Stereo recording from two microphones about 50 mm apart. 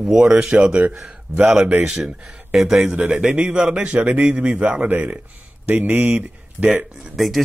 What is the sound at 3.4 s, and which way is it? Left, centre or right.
Speech, centre.